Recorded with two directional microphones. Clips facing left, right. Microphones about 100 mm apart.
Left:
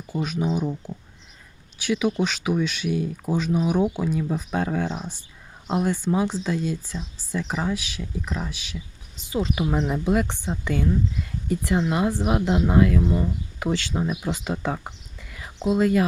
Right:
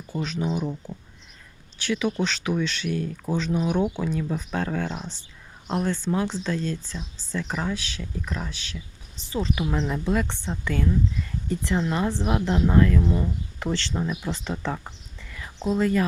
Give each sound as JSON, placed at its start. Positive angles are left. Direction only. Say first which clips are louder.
{"t": 0.1, "sound": "speech", "louder": "left 2 dB", "side_deg": 10}